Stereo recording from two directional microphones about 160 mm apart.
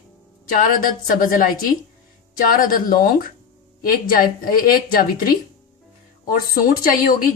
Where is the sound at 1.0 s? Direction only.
60° left (ahead or behind).